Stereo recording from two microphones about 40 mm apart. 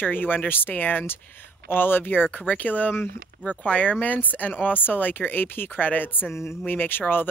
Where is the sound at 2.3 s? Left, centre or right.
Left.